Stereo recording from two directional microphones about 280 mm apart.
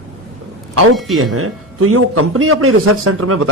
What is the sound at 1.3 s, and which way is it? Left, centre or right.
A man's voice, right.